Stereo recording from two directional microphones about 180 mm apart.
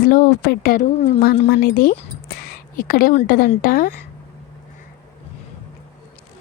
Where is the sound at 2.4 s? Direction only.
55° left (ahead or behind).